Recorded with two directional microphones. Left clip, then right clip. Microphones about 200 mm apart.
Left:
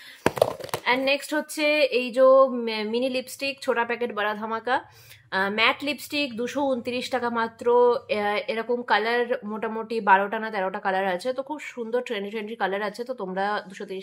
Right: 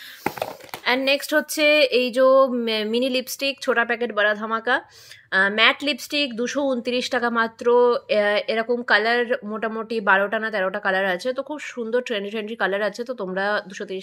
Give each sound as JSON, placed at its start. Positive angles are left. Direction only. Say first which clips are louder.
{"t": 0.8, "sound": "speech", "louder": "right 3 dB", "side_deg": -25}